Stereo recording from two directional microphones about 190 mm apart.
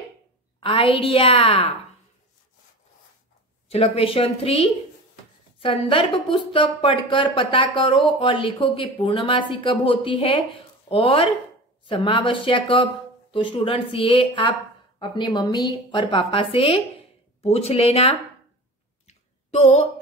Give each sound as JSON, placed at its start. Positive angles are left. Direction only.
{"t": 0.6, "sound": "speech", "side_deg": 25}
{"t": 3.6, "sound": "speech", "side_deg": 30}
{"t": 19.0, "sound": "a sound", "side_deg": 35}